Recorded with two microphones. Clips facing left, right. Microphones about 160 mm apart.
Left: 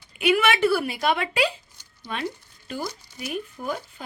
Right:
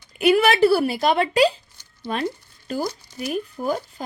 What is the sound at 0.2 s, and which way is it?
A woman's voice, 40° right (ahead or behind).